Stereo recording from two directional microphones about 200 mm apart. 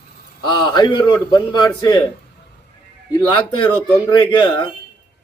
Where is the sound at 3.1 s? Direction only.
25° left (ahead or behind).